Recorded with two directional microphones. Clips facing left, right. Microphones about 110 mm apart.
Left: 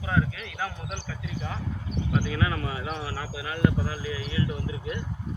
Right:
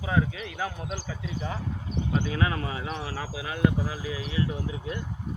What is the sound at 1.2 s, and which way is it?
Speech, 25° right (ahead or behind).